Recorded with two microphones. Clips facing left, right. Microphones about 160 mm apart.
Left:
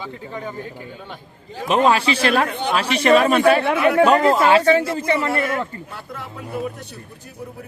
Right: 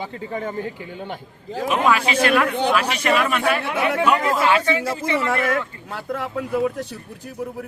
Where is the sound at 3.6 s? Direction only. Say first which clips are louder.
Left 5 dB; 60° left (ahead or behind).